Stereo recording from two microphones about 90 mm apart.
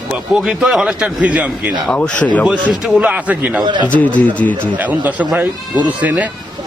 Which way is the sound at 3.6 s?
55° right (ahead or behind).